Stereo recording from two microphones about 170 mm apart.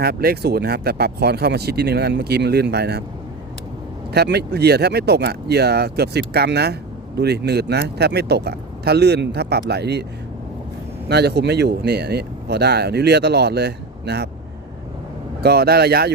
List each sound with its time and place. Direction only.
0.0 s speech: 65° right (ahead or behind)
4.1 s speech: 75° right (ahead or behind)
11.1 s speech: 70° right (ahead or behind)
15.4 s speech: 65° right (ahead or behind)